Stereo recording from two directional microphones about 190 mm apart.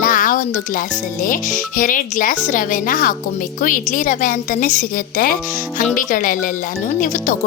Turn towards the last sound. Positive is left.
turn(degrees=40)  # may be behind; listen again after turning